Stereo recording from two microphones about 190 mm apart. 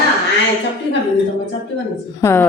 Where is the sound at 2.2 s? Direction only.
15° left (ahead or behind).